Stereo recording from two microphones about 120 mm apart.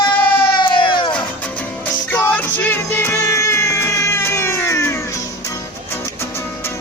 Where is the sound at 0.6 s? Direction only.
45° left (ahead or behind).